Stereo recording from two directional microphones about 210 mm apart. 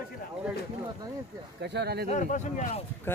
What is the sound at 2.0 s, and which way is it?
Speech, 35° left (ahead or behind).